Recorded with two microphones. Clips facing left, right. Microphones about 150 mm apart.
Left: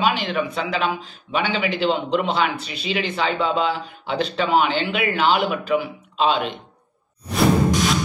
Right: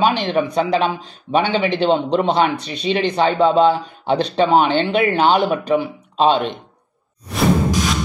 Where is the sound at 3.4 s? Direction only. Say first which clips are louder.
Right 8 dB; 45° right (ahead or behind).